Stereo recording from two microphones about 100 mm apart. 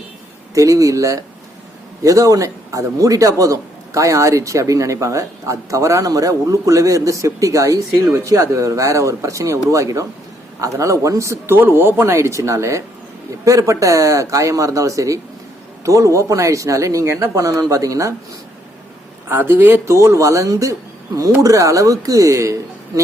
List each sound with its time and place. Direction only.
0.5 s a man's voice: 35° right (ahead or behind)
19.3 s a man's voice: 20° right (ahead or behind)